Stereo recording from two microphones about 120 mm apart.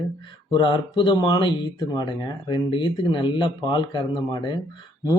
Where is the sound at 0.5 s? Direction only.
40° left (ahead or behind).